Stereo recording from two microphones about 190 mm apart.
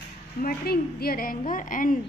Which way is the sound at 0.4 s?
50° left (ahead or behind).